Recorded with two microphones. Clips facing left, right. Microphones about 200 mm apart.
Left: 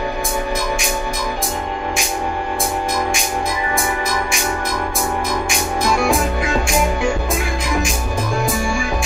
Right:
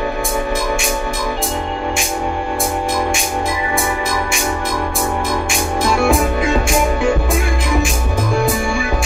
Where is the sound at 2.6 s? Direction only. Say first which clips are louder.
Right 2 dB; centre (ahead or behind).